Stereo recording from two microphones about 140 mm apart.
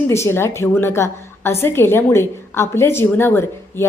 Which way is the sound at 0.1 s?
20° left (ahead or behind).